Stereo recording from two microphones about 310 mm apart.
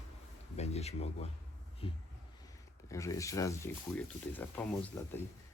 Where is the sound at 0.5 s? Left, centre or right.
Left.